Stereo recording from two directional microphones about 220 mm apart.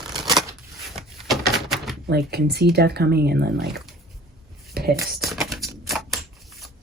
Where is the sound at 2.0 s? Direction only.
45° right (ahead or behind).